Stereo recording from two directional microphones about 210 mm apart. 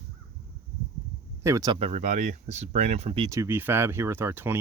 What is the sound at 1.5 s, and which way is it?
Speech, 15° right (ahead or behind).